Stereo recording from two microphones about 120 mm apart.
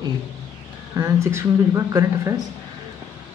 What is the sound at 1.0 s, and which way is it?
A woman's voice, 20° right (ahead or behind).